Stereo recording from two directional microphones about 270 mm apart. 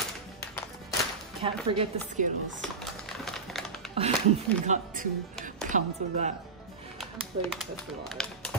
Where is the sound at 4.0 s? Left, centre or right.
Right.